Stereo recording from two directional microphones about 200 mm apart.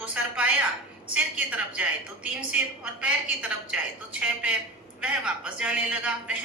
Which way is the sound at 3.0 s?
5° right (ahead or behind).